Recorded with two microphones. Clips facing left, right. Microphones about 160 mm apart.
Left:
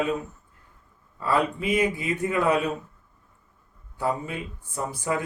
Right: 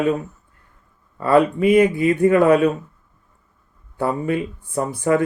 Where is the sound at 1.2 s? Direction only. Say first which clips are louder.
Right 9 dB; 55° right (ahead or behind).